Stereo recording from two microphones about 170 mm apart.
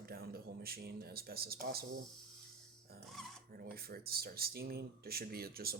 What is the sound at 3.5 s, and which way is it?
Speech, 60° right (ahead or behind).